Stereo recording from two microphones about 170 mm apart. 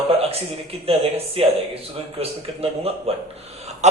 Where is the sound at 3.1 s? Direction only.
35° right (ahead or behind).